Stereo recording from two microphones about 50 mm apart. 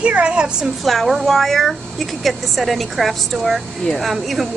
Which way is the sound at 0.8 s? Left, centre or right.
Centre.